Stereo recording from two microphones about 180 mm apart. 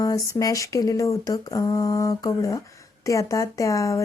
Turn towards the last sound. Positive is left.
turn(degrees=15)  # may be behind; listen again after turning